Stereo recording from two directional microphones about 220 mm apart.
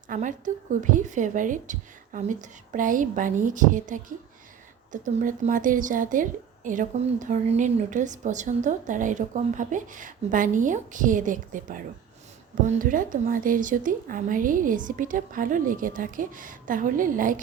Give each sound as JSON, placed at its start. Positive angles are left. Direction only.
{"t": 0.1, "sound": "speech", "side_deg": -35}